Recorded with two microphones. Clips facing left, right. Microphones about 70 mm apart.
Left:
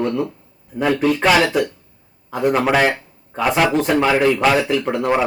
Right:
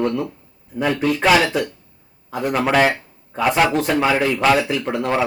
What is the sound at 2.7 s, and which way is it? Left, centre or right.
Speech, centre.